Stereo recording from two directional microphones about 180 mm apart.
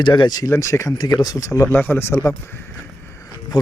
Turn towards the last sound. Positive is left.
turn(degrees=25)  # may be behind; listen again after turning